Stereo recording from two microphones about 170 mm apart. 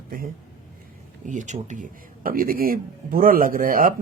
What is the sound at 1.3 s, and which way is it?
Speech, 45° right (ahead or behind).